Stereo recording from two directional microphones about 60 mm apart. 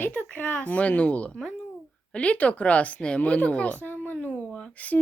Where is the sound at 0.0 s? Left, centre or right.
Left.